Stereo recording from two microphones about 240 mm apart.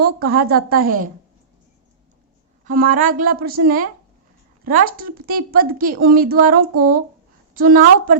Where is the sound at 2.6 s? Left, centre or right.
Right.